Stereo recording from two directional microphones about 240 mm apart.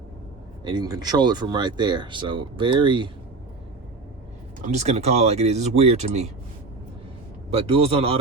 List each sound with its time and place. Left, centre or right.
0.6 s speech: centre
4.6 s speech: right
7.5 s speech: right